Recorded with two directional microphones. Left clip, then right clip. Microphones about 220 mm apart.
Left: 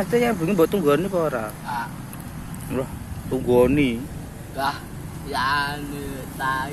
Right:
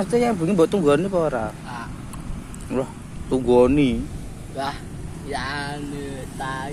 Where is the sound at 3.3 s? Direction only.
20° right (ahead or behind).